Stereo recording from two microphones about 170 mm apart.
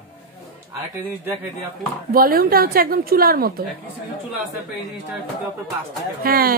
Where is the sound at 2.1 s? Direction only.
60° right (ahead or behind).